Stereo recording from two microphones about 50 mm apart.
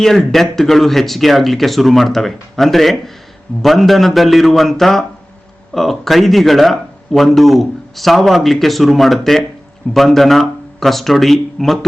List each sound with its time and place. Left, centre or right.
0.2 s speech: centre